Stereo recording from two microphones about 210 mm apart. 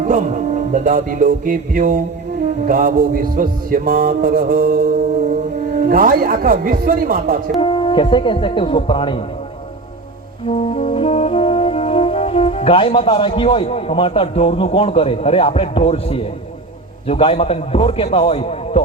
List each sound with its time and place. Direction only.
0.0 s music: 35° right (ahead or behind)
7.6 s a man's voice: 25° left (ahead or behind)
10.4 s brass instrument: 30° left (ahead or behind)
17.1 s a man's voice: 25° left (ahead or behind)